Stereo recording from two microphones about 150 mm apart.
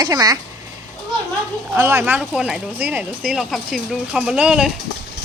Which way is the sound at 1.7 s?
15° right (ahead or behind).